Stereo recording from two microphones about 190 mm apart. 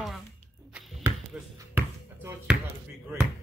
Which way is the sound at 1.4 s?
5° right (ahead or behind).